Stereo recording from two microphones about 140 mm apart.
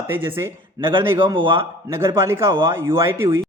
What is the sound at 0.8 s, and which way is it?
Speech, 35° right (ahead or behind).